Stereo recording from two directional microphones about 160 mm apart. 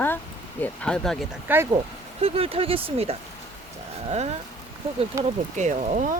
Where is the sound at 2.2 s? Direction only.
35° right (ahead or behind).